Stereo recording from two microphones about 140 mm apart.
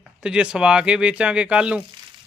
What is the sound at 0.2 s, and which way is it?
Speech, 5° right (ahead or behind).